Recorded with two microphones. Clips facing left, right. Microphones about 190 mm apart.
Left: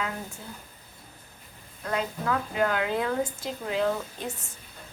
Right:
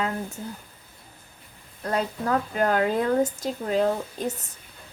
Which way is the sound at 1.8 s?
40° right (ahead or behind).